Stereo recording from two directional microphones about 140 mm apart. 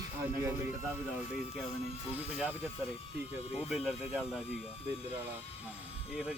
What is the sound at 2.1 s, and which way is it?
Speech, 10° right (ahead or behind).